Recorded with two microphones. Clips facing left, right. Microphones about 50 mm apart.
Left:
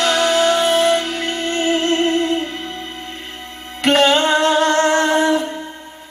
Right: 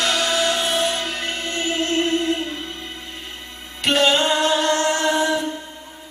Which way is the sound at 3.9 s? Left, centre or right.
Left.